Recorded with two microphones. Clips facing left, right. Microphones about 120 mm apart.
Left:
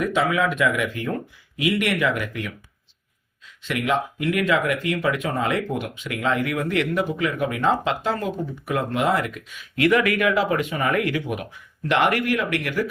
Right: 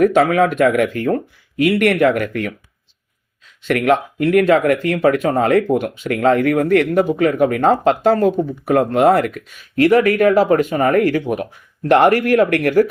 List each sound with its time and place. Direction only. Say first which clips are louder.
0.0 s speech: right 9 dB; 55° right (ahead or behind)
3.6 s speech: right 8 dB; 55° right (ahead or behind)